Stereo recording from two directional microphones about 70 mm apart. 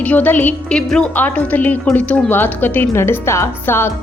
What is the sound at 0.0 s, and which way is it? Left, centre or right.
Speech, left.